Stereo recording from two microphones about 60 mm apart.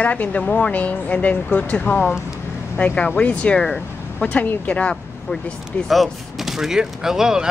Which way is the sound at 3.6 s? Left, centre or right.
Centre.